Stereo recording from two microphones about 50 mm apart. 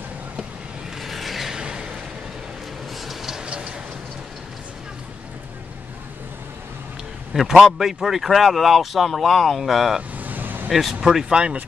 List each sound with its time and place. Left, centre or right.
1.0 s vehicle: centre
1.6 s a sound: centre
3.1 s a sound: centre
3.4 s train: centre
7.5 s speech: centre
10.1 s vehicle: right
10.7 s speech: centre